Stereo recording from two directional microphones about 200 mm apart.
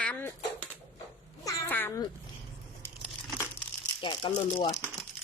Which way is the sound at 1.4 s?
15° left (ahead or behind).